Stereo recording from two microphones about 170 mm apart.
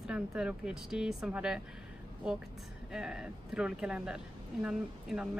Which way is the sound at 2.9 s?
5° right (ahead or behind).